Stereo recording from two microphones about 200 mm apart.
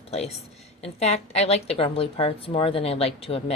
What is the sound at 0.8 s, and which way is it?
A woman's voice, 35° left (ahead or behind).